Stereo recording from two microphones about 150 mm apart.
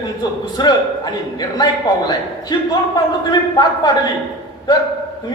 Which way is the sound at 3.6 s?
25° left (ahead or behind).